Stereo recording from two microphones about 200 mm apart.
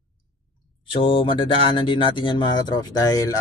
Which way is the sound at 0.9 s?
25° left (ahead or behind).